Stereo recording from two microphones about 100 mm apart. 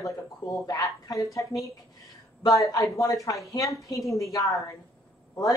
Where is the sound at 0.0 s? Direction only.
35° left (ahead or behind).